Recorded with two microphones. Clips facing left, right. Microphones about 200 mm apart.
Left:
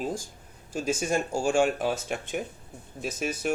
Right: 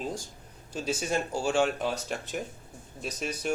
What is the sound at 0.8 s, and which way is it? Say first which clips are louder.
Speech: left 3 dB; 50° left (ahead or behind).